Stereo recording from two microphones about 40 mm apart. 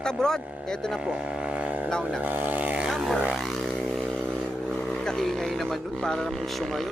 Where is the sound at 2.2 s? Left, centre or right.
Right.